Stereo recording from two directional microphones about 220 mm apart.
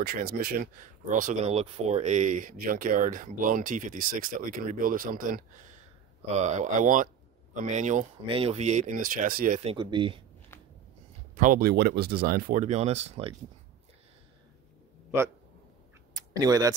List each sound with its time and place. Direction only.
0.0 s speech: 40° right (ahead or behind)
9.6 s speech: 25° right (ahead or behind)
11.3 s speech: 40° right (ahead or behind)
15.0 s a man's voice: 10° right (ahead or behind)
16.3 s speech: 15° right (ahead or behind)